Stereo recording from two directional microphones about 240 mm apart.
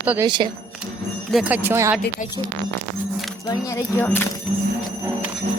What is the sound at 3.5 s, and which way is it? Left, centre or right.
Speech, centre.